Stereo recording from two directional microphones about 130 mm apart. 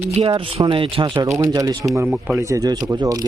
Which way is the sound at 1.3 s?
25° right (ahead or behind).